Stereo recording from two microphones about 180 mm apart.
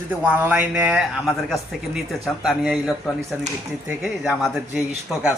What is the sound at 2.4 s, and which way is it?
Speech, centre (ahead or behind).